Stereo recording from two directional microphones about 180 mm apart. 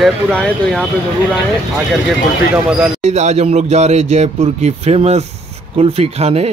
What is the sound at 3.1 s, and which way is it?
A man's voice, 40° right (ahead or behind).